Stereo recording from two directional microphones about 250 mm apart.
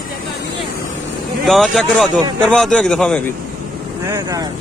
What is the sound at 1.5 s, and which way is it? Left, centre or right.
A man's voice, centre.